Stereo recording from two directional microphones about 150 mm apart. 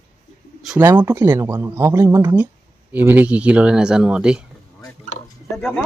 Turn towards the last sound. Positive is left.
turn(degrees=10)  # may be behind; listen again after turning